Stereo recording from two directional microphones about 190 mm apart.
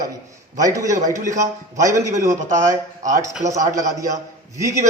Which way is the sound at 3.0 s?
40° right (ahead or behind).